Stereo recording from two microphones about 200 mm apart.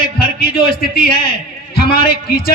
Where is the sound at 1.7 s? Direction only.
50° left (ahead or behind).